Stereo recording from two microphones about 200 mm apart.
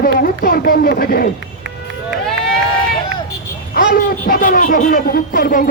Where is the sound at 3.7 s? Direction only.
45° left (ahead or behind).